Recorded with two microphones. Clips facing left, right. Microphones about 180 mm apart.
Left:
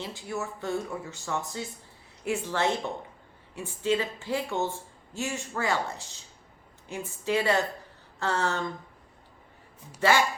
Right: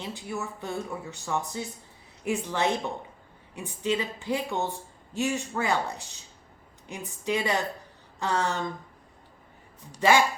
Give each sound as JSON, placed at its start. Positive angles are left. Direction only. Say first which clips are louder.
{"t": 0.0, "sound": "speech", "louder": "even", "side_deg": -15}
{"t": 10.0, "sound": "speech", "louder": "right 2 dB", "side_deg": -15}